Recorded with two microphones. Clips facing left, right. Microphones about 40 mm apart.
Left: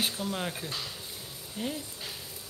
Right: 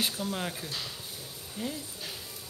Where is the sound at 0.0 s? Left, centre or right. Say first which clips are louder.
Even; centre.